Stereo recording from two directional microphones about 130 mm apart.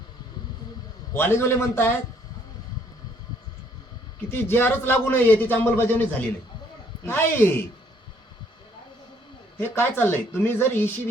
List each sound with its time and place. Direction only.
1.1 s a man's voice: 15° left (ahead or behind)
4.3 s a man's voice: 15° left (ahead or behind)
9.6 s a man's voice: 15° left (ahead or behind)